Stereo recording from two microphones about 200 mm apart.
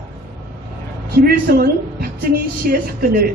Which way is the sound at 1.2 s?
50° right (ahead or behind).